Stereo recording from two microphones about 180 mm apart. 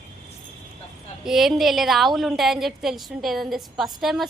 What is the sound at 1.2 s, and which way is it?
A woman's voice, centre (ahead or behind).